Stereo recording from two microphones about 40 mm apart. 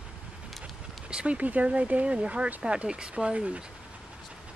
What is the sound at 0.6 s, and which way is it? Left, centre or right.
Speech, right.